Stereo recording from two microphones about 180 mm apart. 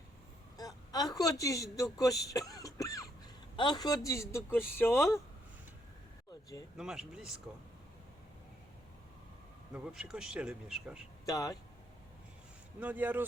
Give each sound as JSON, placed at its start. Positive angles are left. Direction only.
{"t": 0.5, "sound": "a sound", "side_deg": 20}
{"t": 3.5, "sound": "speech", "side_deg": 25}
{"t": 6.7, "sound": "speech", "side_deg": -5}
{"t": 9.7, "sound": "speech", "side_deg": -5}
{"t": 11.3, "sound": "speech", "side_deg": 20}
{"t": 12.8, "sound": "speech", "side_deg": -10}